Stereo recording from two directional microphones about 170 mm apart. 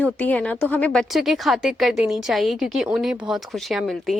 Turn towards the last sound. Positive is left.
turn(degrees=0)  # may be behind; listen again after turning